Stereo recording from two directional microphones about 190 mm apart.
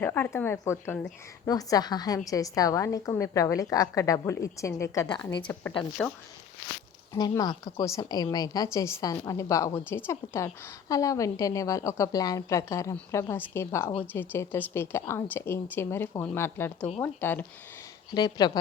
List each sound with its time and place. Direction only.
0.0 s a woman's voice: 10° left (ahead or behind)
1.5 s a woman's voice: 20° left (ahead or behind)
7.1 s a woman's voice: 20° left (ahead or behind)
18.1 s speech: 20° left (ahead or behind)